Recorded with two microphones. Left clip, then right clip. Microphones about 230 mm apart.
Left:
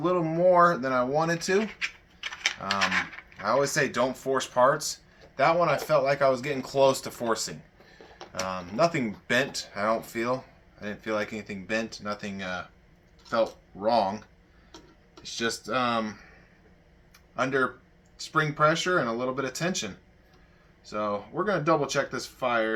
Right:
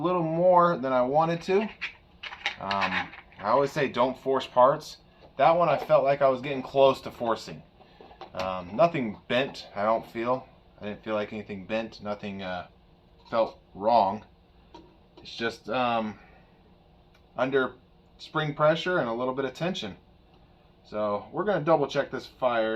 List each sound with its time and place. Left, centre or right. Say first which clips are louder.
0.0 s speech: even; centre
2.2 s a sound: left 2 dB; left
3.5 s speech: even; centre
15.2 s speech: left 2 dB; centre
17.3 s speech: even; centre
20.9 s speech: right 1 dB; centre